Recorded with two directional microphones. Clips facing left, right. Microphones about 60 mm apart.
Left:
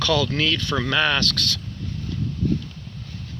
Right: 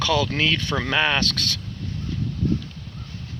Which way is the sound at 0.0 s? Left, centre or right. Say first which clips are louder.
Even; right.